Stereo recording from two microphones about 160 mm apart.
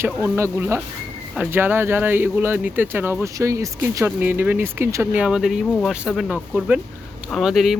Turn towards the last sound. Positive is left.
turn(degrees=0)  # may be behind; listen again after turning